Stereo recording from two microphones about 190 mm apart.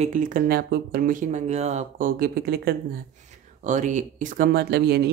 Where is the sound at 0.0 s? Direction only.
45° right (ahead or behind).